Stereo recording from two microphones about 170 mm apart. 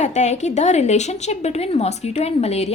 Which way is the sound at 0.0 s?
45° left (ahead or behind).